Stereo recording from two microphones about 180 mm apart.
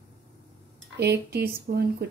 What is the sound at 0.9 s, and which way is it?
Speech, 65° right (ahead or behind).